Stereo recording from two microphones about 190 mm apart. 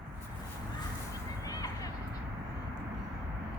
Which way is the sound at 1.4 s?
20° left (ahead or behind).